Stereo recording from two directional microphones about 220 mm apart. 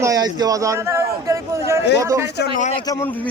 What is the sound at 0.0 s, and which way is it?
A man's voice, 15° right (ahead or behind).